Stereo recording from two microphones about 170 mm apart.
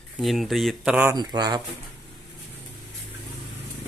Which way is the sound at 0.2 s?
Centre (ahead or behind).